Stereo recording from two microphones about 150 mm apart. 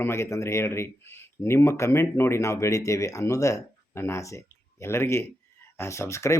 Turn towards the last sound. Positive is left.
turn(degrees=20)  # may be behind; listen again after turning